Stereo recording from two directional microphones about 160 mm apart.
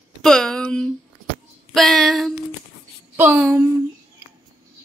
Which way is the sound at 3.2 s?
10° right (ahead or behind).